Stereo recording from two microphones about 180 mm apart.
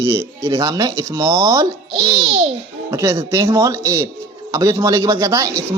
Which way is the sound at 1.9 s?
30° right (ahead or behind).